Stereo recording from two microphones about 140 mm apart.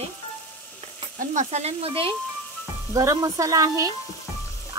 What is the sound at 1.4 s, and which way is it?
Sizzle, 55° right (ahead or behind).